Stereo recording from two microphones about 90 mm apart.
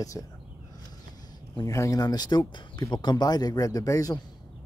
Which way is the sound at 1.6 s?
35° left (ahead or behind).